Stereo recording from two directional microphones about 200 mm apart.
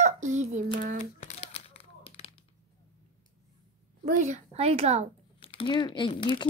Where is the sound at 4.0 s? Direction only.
35° right (ahead or behind).